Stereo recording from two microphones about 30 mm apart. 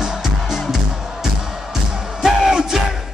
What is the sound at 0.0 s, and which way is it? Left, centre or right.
Music, centre.